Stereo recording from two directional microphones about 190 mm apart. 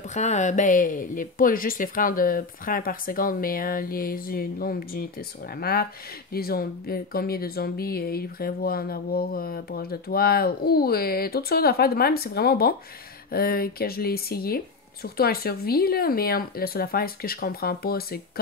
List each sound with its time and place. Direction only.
0.1 s speech: 40° left (ahead or behind)